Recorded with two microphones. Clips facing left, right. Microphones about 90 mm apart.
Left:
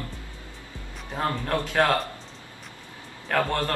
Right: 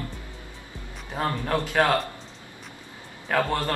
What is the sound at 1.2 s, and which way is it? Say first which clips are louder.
Speech: right 1 dB; 5° right (ahead or behind).